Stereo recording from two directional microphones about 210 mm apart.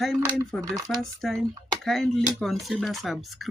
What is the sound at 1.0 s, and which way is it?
Speech, centre (ahead or behind).